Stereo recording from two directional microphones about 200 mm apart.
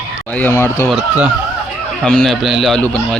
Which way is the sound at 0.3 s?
10° left (ahead or behind).